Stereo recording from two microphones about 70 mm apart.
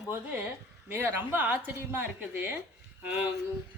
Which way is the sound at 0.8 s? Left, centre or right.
Right.